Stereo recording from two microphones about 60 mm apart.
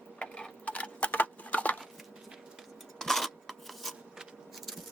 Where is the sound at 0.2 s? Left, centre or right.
Centre.